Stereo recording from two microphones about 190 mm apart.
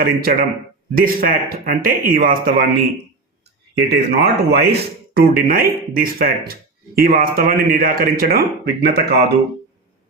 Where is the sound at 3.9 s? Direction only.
60° right (ahead or behind).